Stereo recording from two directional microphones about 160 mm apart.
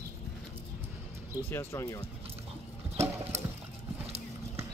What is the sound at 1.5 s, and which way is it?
Speech, 20° left (ahead or behind).